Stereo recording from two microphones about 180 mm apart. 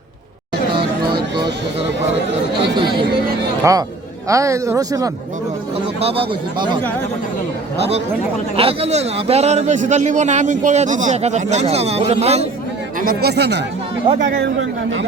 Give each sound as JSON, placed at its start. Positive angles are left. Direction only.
{"t": 0.8, "sound": "a sound", "side_deg": -25}
{"t": 2.7, "sound": "speech", "side_deg": -25}
{"t": 6.0, "sound": "a man's voice", "side_deg": -30}
{"t": 8.5, "sound": "a man's voice", "side_deg": -35}
{"t": 13.0, "sound": "speech", "side_deg": -55}
{"t": 14.3, "sound": "speech", "side_deg": -90}